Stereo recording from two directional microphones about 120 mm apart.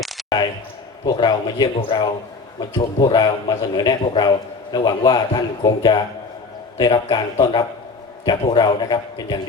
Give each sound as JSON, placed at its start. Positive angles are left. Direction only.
{"t": 0.2, "sound": "basketball bounce", "side_deg": 0}
{"t": 1.1, "sound": "a man's voice", "side_deg": 40}